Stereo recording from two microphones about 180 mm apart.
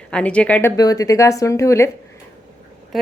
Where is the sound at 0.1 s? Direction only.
5° left (ahead or behind).